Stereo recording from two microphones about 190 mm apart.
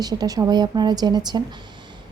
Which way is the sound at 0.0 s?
20° right (ahead or behind).